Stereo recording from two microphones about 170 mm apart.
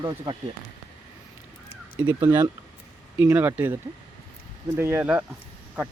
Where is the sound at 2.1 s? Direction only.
20° right (ahead or behind).